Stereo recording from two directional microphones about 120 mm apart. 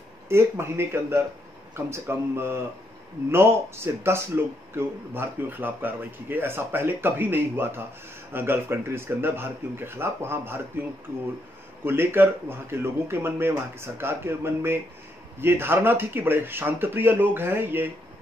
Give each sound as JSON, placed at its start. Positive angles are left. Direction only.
{"t": 0.3, "sound": "speech", "side_deg": -20}
{"t": 11.8, "sound": "speech", "side_deg": -20}